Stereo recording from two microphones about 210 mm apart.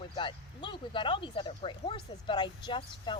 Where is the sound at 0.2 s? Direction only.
25° left (ahead or behind).